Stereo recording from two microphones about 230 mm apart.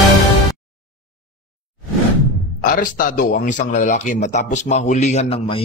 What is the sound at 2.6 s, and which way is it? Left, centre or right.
Speech, left.